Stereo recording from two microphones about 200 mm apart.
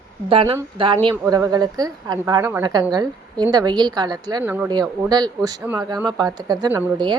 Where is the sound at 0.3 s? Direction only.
25° right (ahead or behind).